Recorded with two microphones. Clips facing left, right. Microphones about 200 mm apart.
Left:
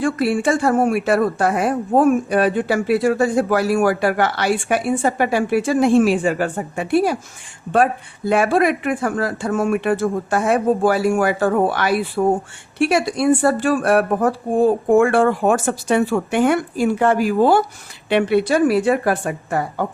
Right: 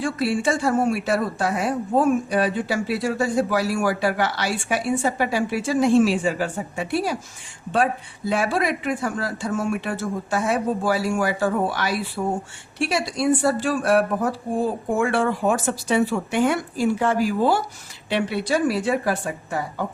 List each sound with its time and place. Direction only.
0.0 s a woman's voice: 55° left (ahead or behind)